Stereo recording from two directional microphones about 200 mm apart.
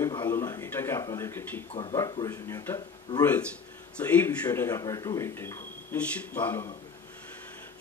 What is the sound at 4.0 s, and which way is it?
Speech, 10° left (ahead or behind).